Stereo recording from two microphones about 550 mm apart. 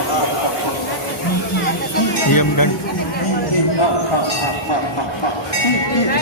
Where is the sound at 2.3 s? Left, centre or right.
Left.